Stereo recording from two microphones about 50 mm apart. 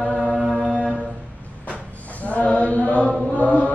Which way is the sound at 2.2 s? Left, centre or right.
Left.